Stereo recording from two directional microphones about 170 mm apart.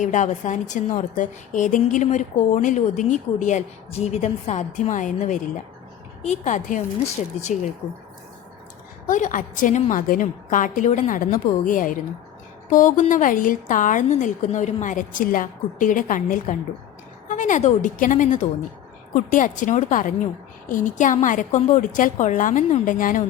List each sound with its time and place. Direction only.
0.0 s a woman's voice: 45° left (ahead or behind)
9.0 s a woman's voice: 50° left (ahead or behind)